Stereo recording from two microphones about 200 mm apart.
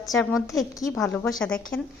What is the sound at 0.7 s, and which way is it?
Speech, 15° left (ahead or behind).